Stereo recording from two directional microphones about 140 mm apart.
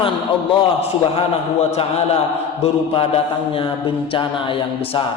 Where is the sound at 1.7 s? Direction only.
50° left (ahead or behind).